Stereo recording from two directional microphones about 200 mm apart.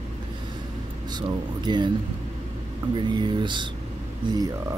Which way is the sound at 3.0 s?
25° right (ahead or behind).